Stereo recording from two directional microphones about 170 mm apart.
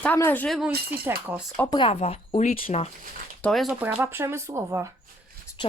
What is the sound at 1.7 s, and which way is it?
Speech, 30° left (ahead or behind).